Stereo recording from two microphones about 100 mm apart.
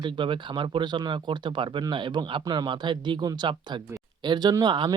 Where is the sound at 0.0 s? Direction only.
55° right (ahead or behind).